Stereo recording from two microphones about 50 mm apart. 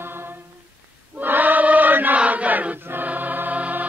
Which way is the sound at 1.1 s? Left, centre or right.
Right.